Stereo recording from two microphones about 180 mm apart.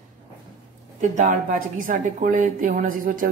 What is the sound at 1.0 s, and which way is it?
Speech, 45° right (ahead or behind).